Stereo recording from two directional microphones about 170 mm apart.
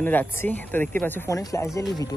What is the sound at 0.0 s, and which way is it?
Speech, 10° left (ahead or behind).